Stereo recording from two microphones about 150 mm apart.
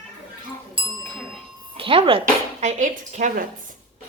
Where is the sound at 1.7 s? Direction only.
35° right (ahead or behind); by 3.4 s 55° right (ahead or behind).